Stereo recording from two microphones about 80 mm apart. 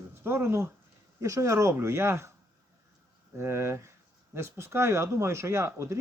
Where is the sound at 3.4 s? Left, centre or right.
Right.